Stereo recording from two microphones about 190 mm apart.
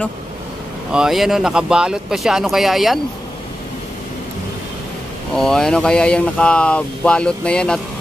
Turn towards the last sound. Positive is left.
turn(degrees=5)  # may be behind; listen again after turning